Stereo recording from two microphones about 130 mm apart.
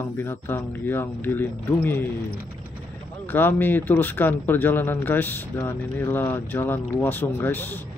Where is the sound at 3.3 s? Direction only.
15° left (ahead or behind).